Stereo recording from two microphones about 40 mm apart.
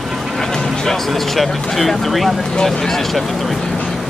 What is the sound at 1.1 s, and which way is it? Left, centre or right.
Speech, centre.